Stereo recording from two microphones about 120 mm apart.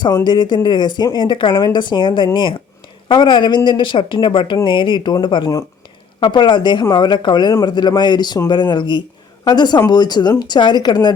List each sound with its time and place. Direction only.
0.3 s speech: 40° left (ahead or behind)